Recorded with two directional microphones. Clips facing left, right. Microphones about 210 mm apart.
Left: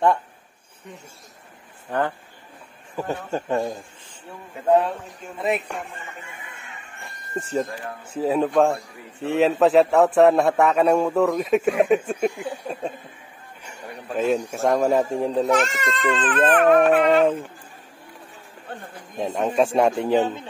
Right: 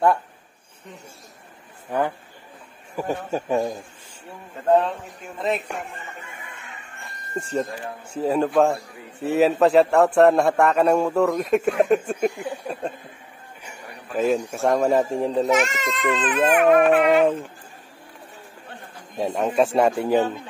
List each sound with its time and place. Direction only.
1.9 s a man's voice: 10° right (ahead or behind)
3.3 s a man's voice: 10° right (ahead or behind)
4.6 s speech: 10° left (ahead or behind)
7.3 s a man's voice: 5° left (ahead or behind)
14.1 s a man's voice: centre (ahead or behind)
19.1 s a man's voice: centre (ahead or behind)
20.2 s speech: 15° left (ahead or behind)